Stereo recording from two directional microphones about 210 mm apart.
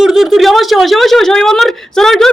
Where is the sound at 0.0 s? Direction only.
Centre (ahead or behind).